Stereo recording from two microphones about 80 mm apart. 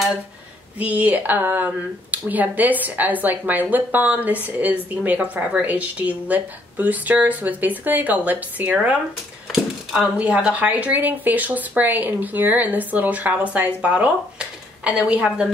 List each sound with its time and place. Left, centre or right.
0.7 s speech: centre
9.5 s a sound: centre
10.1 s a woman's voice: centre